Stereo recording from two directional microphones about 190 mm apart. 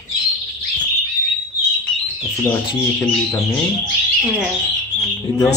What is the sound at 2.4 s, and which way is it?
Speech, 10° left (ahead or behind).